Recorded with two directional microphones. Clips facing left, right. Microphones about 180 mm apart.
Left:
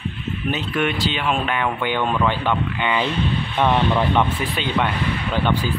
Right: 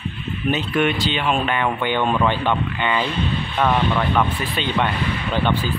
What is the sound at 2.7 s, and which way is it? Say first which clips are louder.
Speech: even; 10° left (ahead or behind).